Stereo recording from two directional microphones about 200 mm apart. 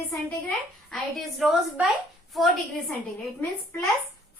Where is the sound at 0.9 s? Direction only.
Centre (ahead or behind).